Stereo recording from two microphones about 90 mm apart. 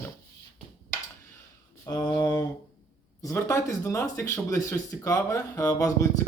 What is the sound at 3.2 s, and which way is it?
Speech, 30° left (ahead or behind).